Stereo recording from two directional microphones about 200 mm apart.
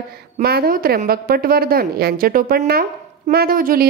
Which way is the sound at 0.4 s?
50° right (ahead or behind).